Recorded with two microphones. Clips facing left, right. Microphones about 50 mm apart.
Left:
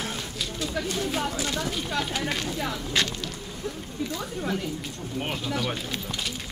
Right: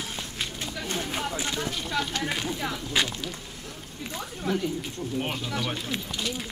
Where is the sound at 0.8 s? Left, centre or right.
Right.